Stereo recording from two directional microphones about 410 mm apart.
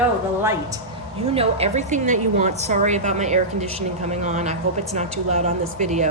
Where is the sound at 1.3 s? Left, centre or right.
Centre.